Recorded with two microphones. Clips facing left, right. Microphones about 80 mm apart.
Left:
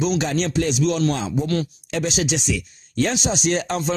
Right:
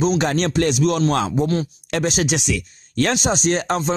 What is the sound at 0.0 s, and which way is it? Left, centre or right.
Speech, right.